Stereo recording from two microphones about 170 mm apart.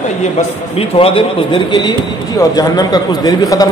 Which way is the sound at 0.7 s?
35° left (ahead or behind).